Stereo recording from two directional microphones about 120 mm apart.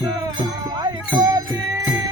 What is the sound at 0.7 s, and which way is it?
Music, 35° right (ahead or behind).